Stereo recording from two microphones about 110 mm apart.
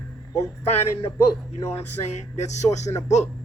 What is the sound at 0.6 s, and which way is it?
Speech, 70° left (ahead or behind).